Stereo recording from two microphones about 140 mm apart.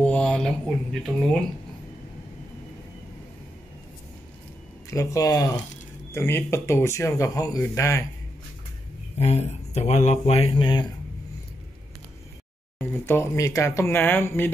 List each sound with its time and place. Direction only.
0.0 s speech: 5° left (ahead or behind)
4.8 s speech: 25° left (ahead or behind)
9.2 s speech: 50° left (ahead or behind)
12.7 s speech: 15° left (ahead or behind)